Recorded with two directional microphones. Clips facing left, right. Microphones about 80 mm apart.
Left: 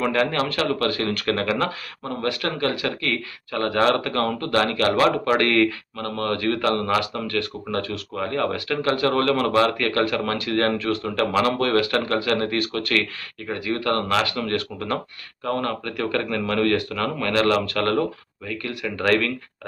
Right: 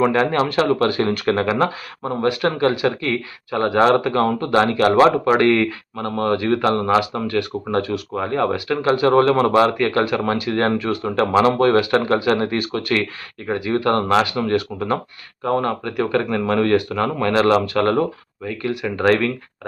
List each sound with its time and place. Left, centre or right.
0.0 s speech: right